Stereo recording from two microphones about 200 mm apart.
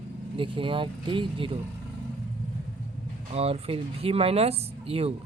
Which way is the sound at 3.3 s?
30° right (ahead or behind).